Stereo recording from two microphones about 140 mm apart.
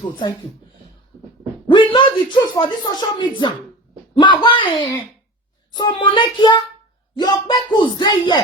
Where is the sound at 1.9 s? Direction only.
35° left (ahead or behind).